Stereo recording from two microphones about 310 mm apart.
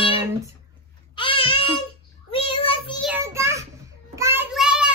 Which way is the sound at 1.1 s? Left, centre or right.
Centre.